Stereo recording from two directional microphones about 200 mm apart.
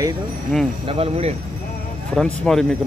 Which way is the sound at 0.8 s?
30° right (ahead or behind).